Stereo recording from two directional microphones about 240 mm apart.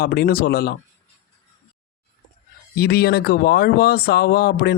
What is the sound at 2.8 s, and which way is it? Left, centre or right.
Speech, left.